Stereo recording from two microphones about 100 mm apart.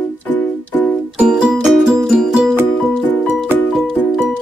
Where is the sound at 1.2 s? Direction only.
5° right (ahead or behind).